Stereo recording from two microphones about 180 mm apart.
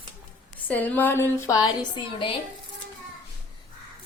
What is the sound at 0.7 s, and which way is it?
A woman's voice, 10° left (ahead or behind).